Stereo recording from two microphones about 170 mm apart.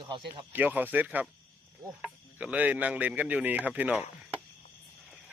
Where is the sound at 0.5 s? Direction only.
10° right (ahead or behind).